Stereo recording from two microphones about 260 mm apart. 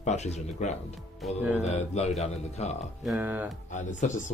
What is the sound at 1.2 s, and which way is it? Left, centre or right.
Speech, centre.